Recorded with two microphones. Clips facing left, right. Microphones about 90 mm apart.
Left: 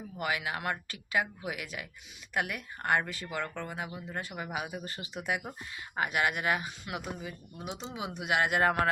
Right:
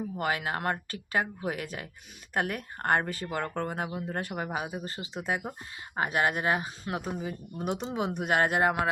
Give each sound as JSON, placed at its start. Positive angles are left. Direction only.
{"t": 0.2, "sound": "speech", "side_deg": -40}
{"t": 4.4, "sound": "speech", "side_deg": -35}
{"t": 7.6, "sound": "speech", "side_deg": -50}